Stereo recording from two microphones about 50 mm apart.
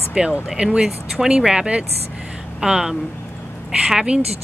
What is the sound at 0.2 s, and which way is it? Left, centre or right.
Speech, centre.